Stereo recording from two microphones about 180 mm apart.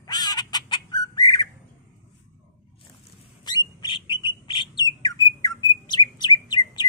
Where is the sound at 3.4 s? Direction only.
25° left (ahead or behind).